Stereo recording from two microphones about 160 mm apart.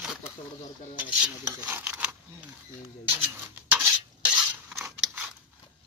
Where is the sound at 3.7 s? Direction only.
10° right (ahead or behind).